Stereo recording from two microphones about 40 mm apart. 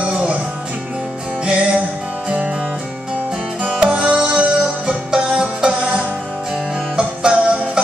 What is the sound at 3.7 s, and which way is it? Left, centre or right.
Music, right.